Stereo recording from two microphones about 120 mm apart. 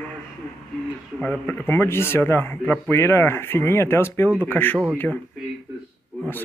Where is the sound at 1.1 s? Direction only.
15° left (ahead or behind).